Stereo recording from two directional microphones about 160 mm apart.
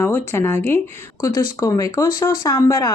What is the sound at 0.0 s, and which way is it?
Speech, 15° left (ahead or behind).